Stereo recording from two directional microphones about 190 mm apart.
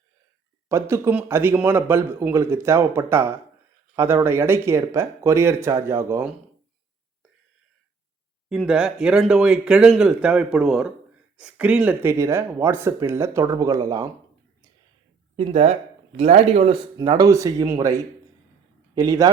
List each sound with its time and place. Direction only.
0.7 s speech: 15° right (ahead or behind)
8.4 s speech: 5° right (ahead or behind); by 14.1 s 20° right (ahead or behind)
15.4 s speech: 35° right (ahead or behind)
17.0 s speech: 20° right (ahead or behind)